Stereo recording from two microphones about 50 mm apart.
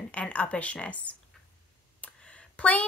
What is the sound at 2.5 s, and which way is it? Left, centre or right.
Speech, left.